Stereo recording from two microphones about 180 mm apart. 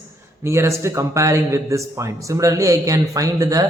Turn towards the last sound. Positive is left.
turn(degrees=-20)  # may be behind; listen again after turning